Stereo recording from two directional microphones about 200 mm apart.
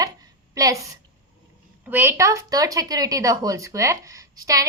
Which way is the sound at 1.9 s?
10° right (ahead or behind).